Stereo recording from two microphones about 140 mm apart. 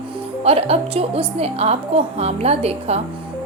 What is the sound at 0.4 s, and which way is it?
A woman's voice, 45° right (ahead or behind).